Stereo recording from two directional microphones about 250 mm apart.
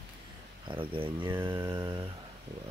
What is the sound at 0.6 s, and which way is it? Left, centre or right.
Speech, right.